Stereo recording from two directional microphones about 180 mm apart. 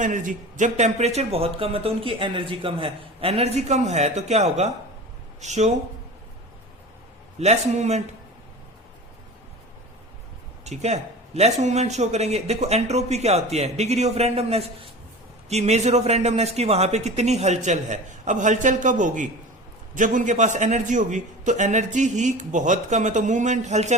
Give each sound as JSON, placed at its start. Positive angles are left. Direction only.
{"t": 0.0, "sound": "speech", "side_deg": -45}
{"t": 7.3, "sound": "speech", "side_deg": -40}
{"t": 10.6, "sound": "a man's voice", "side_deg": -40}